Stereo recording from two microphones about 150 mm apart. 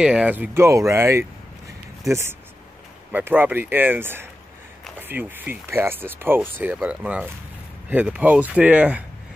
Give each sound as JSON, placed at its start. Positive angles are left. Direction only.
{"t": 0.0, "sound": "speech", "side_deg": -5}
{"t": 3.1, "sound": "speech", "side_deg": -10}